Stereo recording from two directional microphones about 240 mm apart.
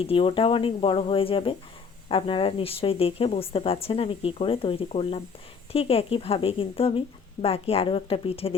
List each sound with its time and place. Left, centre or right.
0.0 s speech: left